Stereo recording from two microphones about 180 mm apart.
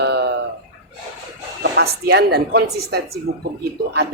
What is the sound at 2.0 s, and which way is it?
Speech, 60° right (ahead or behind).